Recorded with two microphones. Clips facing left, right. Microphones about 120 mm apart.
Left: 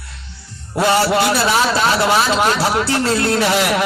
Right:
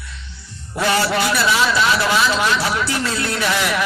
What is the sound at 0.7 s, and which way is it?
A man's voice, 30° left (ahead or behind).